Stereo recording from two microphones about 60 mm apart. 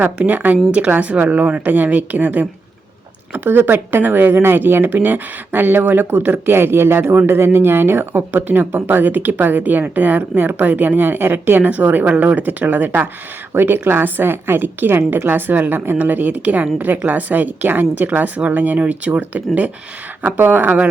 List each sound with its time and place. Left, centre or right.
0.3 s a woman's voice: right